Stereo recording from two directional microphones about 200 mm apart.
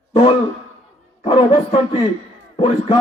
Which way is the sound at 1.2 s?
25° left (ahead or behind).